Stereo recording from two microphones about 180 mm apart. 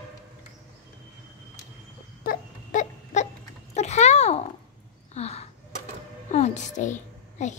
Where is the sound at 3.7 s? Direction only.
40° left (ahead or behind).